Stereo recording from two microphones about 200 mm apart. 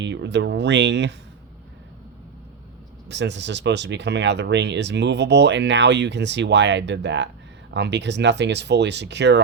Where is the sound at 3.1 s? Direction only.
60° right (ahead or behind).